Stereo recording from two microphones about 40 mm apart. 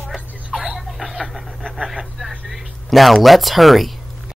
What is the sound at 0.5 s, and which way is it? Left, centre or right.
Speech, centre.